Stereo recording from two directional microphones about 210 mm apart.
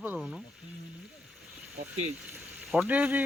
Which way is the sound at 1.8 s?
45° right (ahead or behind).